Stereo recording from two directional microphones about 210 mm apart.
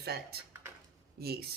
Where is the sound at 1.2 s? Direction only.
50° right (ahead or behind).